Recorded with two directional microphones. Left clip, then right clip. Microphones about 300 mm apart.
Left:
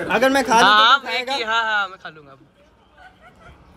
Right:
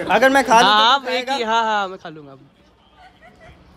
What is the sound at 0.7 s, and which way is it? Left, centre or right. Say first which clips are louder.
A man's voice: left 1 dB; centre.